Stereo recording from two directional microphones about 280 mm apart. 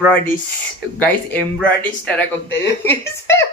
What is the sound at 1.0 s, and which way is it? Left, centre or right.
Speech, centre.